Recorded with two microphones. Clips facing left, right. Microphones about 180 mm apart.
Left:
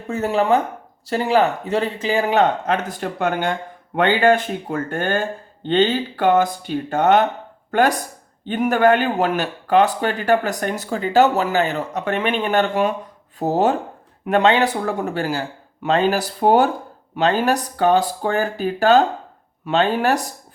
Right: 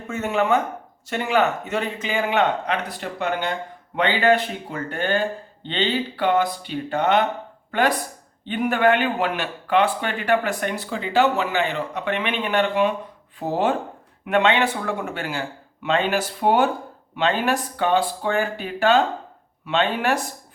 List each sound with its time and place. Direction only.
0.1 s speech: 35° left (ahead or behind)